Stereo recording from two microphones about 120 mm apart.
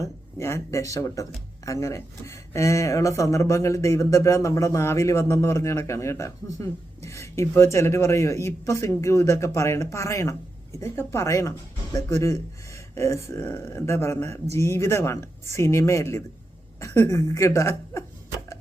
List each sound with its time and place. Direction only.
0.0 s speech: 25° left (ahead or behind)